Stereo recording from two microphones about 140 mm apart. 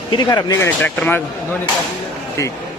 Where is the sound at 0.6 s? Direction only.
10° left (ahead or behind).